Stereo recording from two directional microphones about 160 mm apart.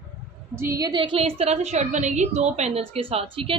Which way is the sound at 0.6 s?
20° right (ahead or behind).